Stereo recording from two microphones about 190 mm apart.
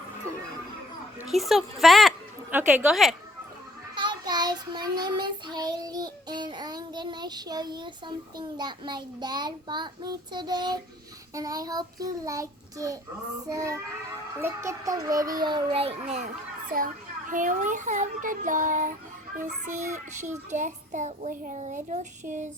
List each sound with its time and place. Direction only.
1.3 s speech: centre (ahead or behind)
3.9 s child singing: 25° right (ahead or behind)
11.3 s a child's voice: 20° right (ahead or behind)
14.4 s child singing: 15° right (ahead or behind); by 16.3 s 35° right (ahead or behind)
16.7 s a child's voice: 45° right (ahead or behind)
19.6 s child singing: 40° right (ahead or behind)